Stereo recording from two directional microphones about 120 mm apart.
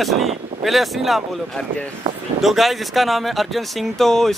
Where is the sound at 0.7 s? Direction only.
Centre (ahead or behind).